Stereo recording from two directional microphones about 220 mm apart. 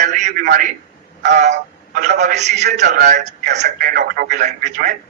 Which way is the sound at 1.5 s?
45° right (ahead or behind).